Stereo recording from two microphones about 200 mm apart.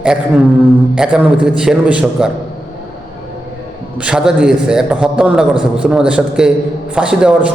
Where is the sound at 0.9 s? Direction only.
5° right (ahead or behind).